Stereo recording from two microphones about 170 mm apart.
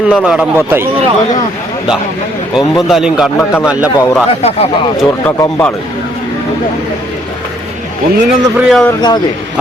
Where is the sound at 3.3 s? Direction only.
15° left (ahead or behind).